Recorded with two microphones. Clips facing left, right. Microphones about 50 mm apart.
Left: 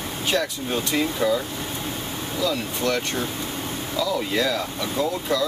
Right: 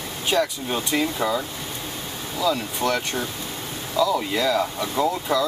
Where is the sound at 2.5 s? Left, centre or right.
Centre.